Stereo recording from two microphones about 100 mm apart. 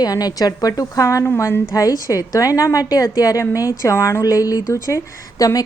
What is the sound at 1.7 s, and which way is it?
Speech, 35° left (ahead or behind).